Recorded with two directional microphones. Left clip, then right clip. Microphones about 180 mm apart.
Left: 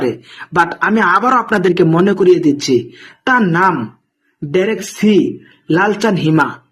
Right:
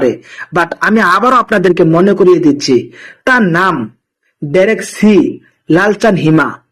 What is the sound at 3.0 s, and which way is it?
Speech, centre (ahead or behind).